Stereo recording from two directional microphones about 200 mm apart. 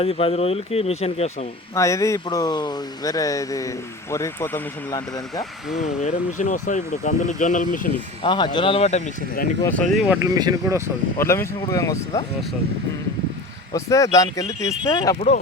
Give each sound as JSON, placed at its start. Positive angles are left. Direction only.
{"t": 0.0, "sound": "speech", "side_deg": 30}
{"t": 1.7, "sound": "speech", "side_deg": 15}
{"t": 6.0, "sound": "speech", "side_deg": 35}
{"t": 8.2, "sound": "speech", "side_deg": 25}
{"t": 9.6, "sound": "speech", "side_deg": 5}
{"t": 10.3, "sound": "speech", "side_deg": -15}
{"t": 11.2, "sound": "speech", "side_deg": 15}
{"t": 13.7, "sound": "speech", "side_deg": 15}
{"t": 15.1, "sound": "speech", "side_deg": 35}